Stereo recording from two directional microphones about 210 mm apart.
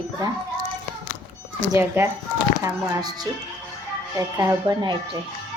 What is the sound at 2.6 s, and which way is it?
Speech, 20° right (ahead or behind).